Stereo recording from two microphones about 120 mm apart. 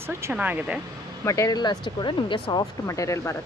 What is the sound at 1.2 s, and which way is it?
Speech, 25° left (ahead or behind).